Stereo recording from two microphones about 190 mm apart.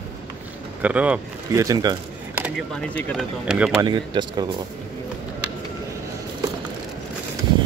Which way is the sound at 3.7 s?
25° right (ahead or behind).